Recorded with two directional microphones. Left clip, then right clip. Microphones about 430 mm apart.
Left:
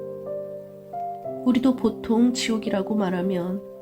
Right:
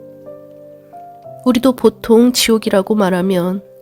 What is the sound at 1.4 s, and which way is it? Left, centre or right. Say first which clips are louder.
Speech: right 10 dB; right.